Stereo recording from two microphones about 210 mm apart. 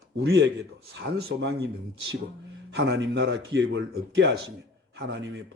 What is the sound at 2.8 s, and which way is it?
Speech, 55° right (ahead or behind).